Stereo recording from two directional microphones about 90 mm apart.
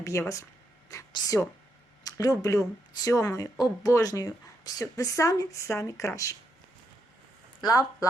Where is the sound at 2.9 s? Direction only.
40° left (ahead or behind).